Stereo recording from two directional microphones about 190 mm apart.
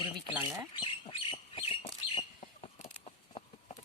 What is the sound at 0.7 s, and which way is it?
Bird, 25° left (ahead or behind).